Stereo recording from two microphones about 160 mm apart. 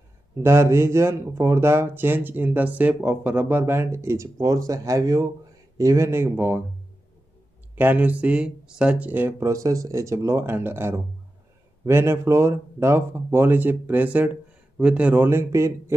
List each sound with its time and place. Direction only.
0.4 s speech: 15° right (ahead or behind)
7.7 s speech: 10° right (ahead or behind)